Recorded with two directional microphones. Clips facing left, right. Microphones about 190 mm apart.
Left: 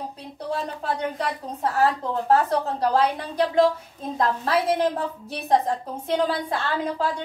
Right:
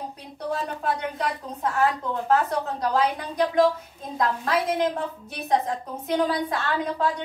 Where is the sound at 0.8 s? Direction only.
35° left (ahead or behind).